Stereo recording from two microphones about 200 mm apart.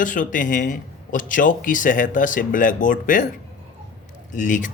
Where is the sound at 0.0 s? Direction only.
40° left (ahead or behind).